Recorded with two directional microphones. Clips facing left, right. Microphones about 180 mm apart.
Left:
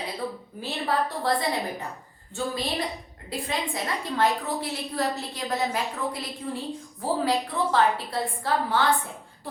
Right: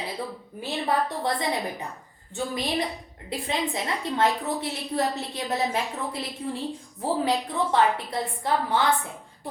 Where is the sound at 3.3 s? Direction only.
20° right (ahead or behind).